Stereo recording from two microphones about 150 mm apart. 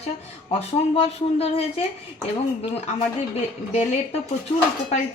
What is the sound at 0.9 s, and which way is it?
Speech, 40° left (ahead or behind).